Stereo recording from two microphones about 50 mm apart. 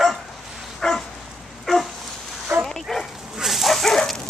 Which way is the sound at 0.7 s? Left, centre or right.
Centre.